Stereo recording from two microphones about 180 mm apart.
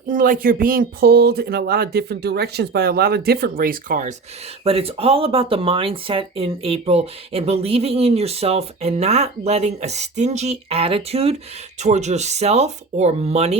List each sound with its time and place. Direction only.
0.1 s speech: 50° right (ahead or behind)
4.6 s speech: 30° right (ahead or behind)